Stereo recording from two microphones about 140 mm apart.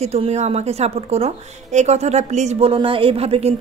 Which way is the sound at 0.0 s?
50° right (ahead or behind).